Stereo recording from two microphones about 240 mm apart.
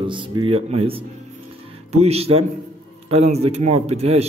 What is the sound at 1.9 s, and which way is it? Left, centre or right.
A man's voice, right.